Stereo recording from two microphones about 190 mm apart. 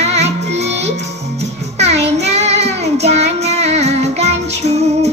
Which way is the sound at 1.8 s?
35° right (ahead or behind).